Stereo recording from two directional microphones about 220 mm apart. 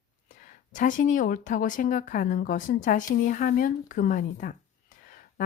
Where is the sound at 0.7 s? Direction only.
35° left (ahead or behind).